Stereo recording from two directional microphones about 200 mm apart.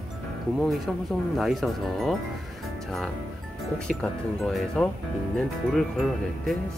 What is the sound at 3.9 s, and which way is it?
Speech, 5° left (ahead or behind).